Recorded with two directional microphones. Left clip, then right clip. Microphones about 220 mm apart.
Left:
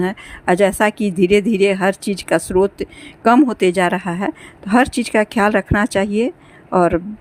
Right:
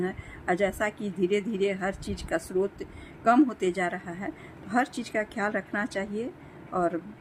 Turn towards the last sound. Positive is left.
turn(degrees=40)  # may be behind; listen again after turning